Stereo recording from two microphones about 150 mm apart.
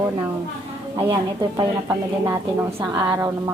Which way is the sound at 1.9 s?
20° right (ahead or behind).